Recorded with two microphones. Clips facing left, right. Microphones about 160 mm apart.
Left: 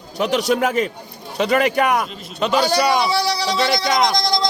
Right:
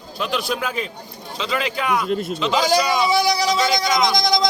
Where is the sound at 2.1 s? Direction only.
50° right (ahead or behind).